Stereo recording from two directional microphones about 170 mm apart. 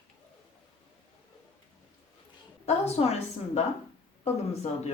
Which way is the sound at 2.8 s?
40° left (ahead or behind).